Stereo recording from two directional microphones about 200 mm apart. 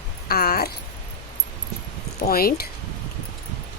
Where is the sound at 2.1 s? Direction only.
50° left (ahead or behind).